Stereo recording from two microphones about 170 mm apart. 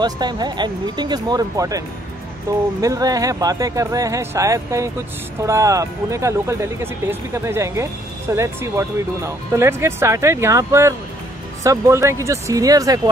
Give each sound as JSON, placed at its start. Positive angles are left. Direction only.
{"t": 0.0, "sound": "speech", "side_deg": -25}